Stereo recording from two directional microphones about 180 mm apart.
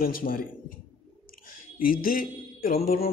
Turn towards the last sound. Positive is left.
turn(degrees=55)  # may be behind; listen again after turning